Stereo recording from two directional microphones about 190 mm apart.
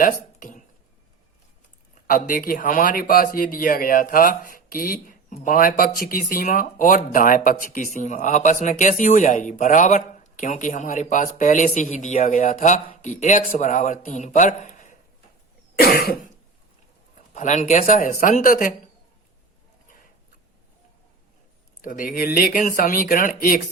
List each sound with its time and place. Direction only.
0.0 s a sound: 45° left (ahead or behind)
2.0 s speech: 50° left (ahead or behind)
15.8 s speech: 55° left (ahead or behind)
17.3 s speech: 40° left (ahead or behind)
21.8 s speech: 45° left (ahead or behind)